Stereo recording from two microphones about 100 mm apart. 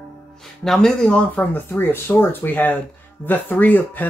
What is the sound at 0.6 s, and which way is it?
Speech, 5° left (ahead or behind).